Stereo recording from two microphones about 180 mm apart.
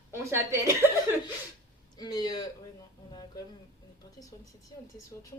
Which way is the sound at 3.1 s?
20° left (ahead or behind).